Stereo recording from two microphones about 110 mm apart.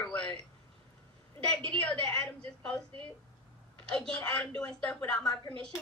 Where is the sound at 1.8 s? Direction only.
10° left (ahead or behind).